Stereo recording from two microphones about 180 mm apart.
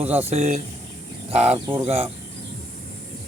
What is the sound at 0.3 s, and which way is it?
Speech, 40° right (ahead or behind).